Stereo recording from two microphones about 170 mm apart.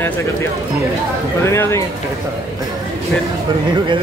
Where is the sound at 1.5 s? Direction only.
15° left (ahead or behind).